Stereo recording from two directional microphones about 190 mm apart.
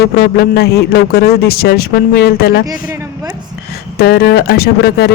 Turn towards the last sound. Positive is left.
turn(degrees=60)  # may be behind; listen again after turning